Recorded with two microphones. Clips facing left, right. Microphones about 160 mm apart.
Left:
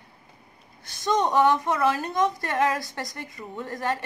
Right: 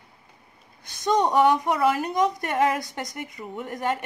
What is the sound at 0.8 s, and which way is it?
A woman's voice, 20° right (ahead or behind).